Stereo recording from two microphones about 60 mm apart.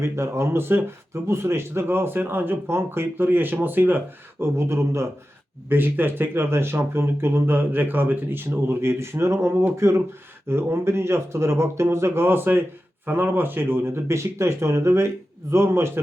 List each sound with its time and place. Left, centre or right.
0.0 s speech: right
5.6 s speech: right